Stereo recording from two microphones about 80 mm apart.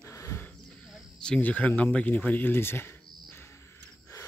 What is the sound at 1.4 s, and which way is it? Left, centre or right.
Speech, left.